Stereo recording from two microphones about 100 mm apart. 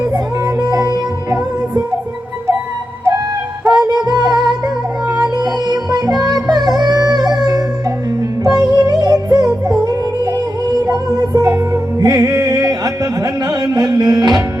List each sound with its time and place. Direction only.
0.0 s music: 35° right (ahead or behind)
3.7 s music: 45° right (ahead or behind)